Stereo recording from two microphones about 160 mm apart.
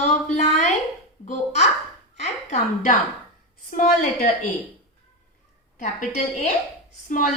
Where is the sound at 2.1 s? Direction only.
45° left (ahead or behind).